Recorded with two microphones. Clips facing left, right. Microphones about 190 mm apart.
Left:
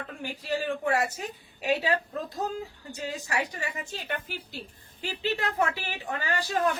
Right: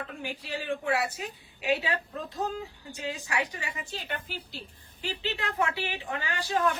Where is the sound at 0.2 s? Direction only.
45° left (ahead or behind).